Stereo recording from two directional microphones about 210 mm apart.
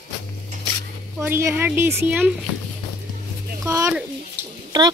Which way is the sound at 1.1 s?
10° right (ahead or behind).